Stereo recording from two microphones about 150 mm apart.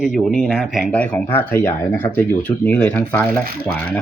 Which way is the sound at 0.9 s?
10° left (ahead or behind).